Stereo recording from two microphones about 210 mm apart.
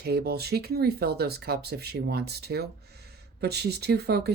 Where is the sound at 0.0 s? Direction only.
50° right (ahead or behind).